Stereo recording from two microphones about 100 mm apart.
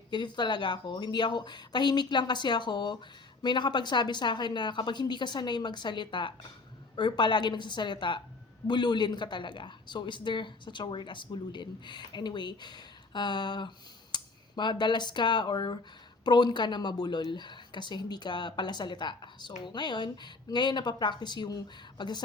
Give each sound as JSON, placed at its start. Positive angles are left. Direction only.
{"t": 0.1, "sound": "speech", "side_deg": 50}